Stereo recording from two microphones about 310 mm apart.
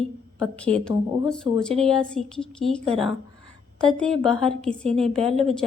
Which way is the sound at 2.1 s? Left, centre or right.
Centre.